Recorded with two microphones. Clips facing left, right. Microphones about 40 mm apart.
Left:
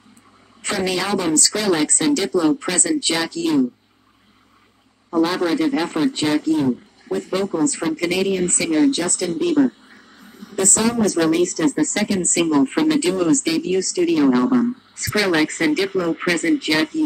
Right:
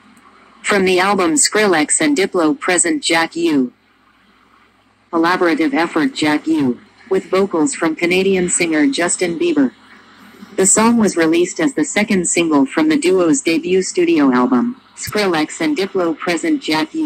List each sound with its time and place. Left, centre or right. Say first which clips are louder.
0.7 s speech: right 8 dB; right
1.9 s speech: right 4 dB; right
5.1 s speech: right 5 dB; right
10.4 s speech: right 6 dB; right
11.4 s speech: right 2 dB; right
12.1 s speech: right 4 dB; right
12.7 s speech: right 5 dB; right
13.5 s speech: right 5 dB; right
15.3 s speech: right 1 dB; centre